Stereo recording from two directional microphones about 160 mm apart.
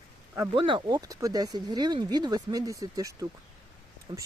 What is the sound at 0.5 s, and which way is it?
Speech, 30° right (ahead or behind).